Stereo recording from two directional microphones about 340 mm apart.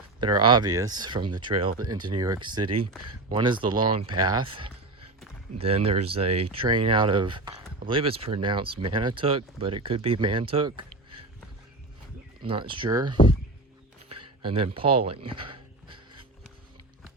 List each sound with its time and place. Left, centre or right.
0.2 s speech: centre
12.4 s speech: centre
14.4 s speech: centre